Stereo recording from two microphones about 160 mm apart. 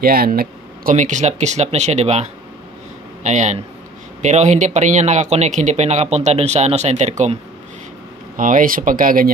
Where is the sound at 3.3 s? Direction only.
45° right (ahead or behind).